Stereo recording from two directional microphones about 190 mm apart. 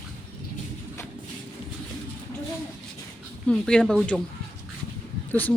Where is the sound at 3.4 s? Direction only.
5° left (ahead or behind).